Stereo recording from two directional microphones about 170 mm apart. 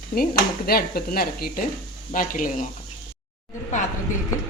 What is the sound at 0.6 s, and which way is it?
Speech, 65° left (ahead or behind).